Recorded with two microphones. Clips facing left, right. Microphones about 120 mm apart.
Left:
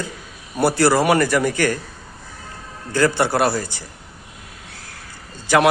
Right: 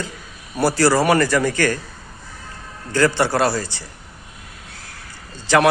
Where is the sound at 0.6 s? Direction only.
15° left (ahead or behind).